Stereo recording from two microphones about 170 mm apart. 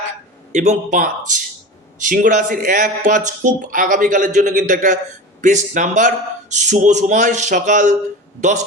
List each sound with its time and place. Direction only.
0.5 s speech: 45° right (ahead or behind)